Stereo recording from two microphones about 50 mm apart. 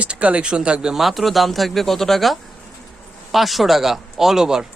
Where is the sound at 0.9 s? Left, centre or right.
Centre.